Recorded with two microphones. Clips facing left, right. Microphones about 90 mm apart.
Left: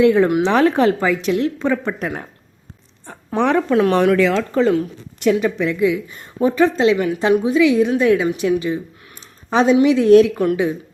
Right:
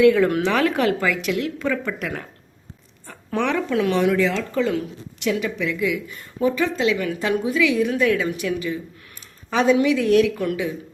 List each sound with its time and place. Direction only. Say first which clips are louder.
0.0 s a woman's voice: left 2 dB; 25° left (ahead or behind)
3.3 s speech: left 6 dB; 40° left (ahead or behind); by 4.4 s 70° left (ahead or behind)
4.5 s a woman's voice: left 6 dB; 35° left (ahead or behind)
5.8 s a woman's voice: left 6 dB; 30° left (ahead or behind)